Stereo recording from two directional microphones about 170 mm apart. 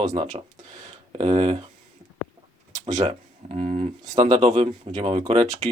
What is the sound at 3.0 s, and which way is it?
Speech, 40° right (ahead or behind).